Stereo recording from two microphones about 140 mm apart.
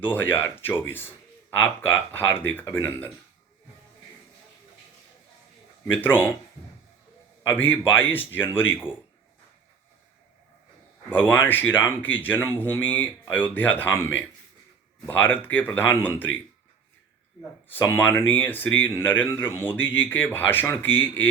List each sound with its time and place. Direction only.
0.1 s speech: 15° left (ahead or behind)
5.8 s speech: 15° left (ahead or behind)
7.4 s speech: 15° left (ahead or behind)
11.1 s speech: 15° left (ahead or behind)
17.7 s speech: 15° left (ahead or behind)